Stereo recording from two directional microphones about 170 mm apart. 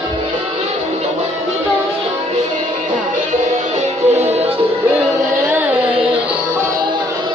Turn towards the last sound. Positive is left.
turn(degrees=-10)  # may be behind; listen again after turning